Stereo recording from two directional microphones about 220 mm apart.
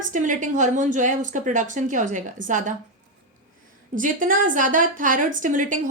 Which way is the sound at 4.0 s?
35° right (ahead or behind).